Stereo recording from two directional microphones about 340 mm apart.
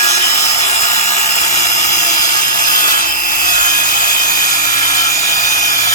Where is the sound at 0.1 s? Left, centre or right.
Centre.